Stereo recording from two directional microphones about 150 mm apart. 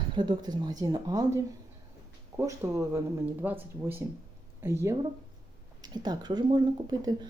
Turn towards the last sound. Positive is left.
turn(degrees=-30)  # may be behind; listen again after turning